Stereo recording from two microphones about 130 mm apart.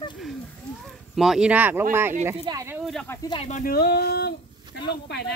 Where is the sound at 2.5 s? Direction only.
35° right (ahead or behind).